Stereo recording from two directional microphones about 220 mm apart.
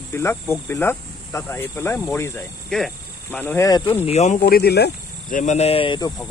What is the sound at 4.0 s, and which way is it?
Speech, 30° left (ahead or behind).